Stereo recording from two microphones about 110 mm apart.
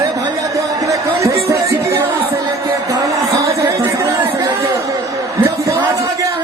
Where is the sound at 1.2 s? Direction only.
30° right (ahead or behind).